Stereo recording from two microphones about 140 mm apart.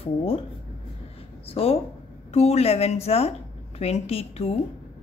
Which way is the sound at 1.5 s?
45° left (ahead or behind).